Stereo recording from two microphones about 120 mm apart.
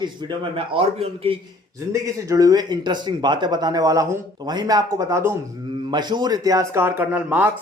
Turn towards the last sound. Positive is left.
turn(degrees=-15)  # may be behind; listen again after turning